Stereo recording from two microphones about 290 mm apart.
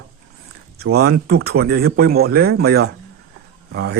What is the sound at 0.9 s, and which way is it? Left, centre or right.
A man's voice, right.